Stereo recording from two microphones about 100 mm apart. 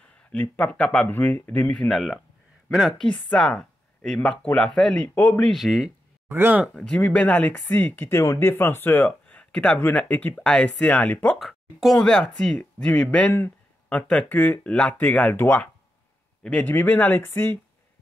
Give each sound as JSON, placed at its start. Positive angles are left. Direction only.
{"t": 0.1, "sound": "speech", "side_deg": 15}
{"t": 1.7, "sound": "speech", "side_deg": 5}
{"t": 5.5, "sound": "speech", "side_deg": 0}
{"t": 6.2, "sound": "speech", "side_deg": -25}
{"t": 6.7, "sound": "speech", "side_deg": 5}
{"t": 11.3, "sound": "speech", "side_deg": 0}